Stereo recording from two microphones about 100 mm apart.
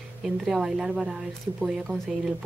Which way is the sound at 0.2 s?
5° right (ahead or behind).